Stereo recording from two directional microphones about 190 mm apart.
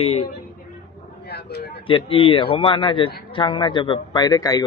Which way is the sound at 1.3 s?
60° left (ahead or behind).